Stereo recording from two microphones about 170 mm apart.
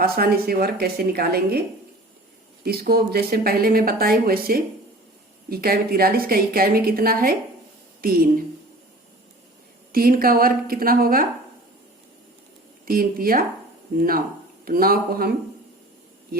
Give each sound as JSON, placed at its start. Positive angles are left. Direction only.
{"t": 0.0, "sound": "speech", "side_deg": -60}
{"t": 2.6, "sound": "speech", "side_deg": -65}
{"t": 9.9, "sound": "speech", "side_deg": -60}
{"t": 12.8, "sound": "speech", "side_deg": -60}
{"t": 14.6, "sound": "speech", "side_deg": -60}